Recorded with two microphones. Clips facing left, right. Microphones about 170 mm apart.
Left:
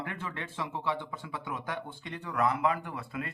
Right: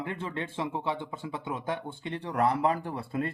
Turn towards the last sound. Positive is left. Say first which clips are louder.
# right 6 dB
turn(degrees=-30)  # may be behind; listen again after turning